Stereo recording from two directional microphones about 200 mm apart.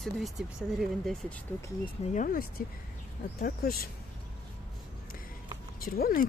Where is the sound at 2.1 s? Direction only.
40° left (ahead or behind).